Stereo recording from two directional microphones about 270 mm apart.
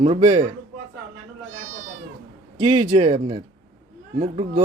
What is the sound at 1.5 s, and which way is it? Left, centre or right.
Cat, right.